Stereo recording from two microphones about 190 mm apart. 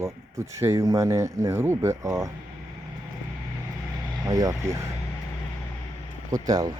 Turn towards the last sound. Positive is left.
turn(degrees=-20)  # may be behind; listen again after turning